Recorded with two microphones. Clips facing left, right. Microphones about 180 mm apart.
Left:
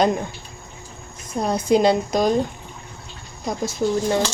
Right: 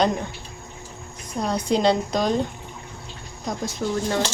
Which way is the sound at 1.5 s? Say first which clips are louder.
Left 3 dB; 5° left (ahead or behind).